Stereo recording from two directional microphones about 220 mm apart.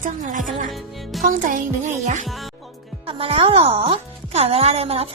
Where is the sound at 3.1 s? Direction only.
25° right (ahead or behind).